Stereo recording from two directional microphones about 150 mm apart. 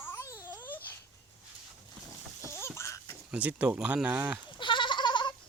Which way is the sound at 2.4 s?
20° left (ahead or behind).